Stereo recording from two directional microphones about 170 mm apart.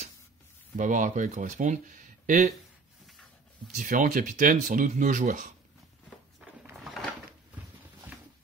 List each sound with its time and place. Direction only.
0.7 s speech: 50° right (ahead or behind)
3.7 s speech: 50° right (ahead or behind)
6.8 s a sound: centre (ahead or behind)